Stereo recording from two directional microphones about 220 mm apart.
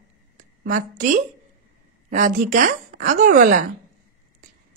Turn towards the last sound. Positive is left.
turn(degrees=-40)  # may be behind; listen again after turning